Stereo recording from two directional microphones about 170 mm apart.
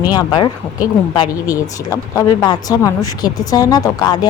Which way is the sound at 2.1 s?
20° left (ahead or behind).